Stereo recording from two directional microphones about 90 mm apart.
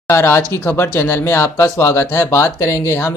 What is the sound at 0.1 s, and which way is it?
Speech, 30° left (ahead or behind).